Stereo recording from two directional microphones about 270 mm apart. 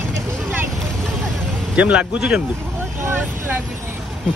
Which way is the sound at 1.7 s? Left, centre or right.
Centre.